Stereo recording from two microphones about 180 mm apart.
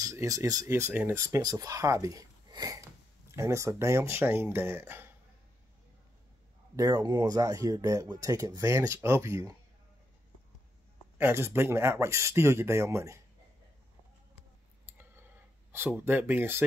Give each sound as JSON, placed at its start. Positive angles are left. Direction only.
{"t": 0.0, "sound": "speech", "side_deg": -15}
{"t": 6.8, "sound": "speech", "side_deg": -20}
{"t": 11.1, "sound": "speech", "side_deg": -15}
{"t": 15.7, "sound": "speech", "side_deg": -15}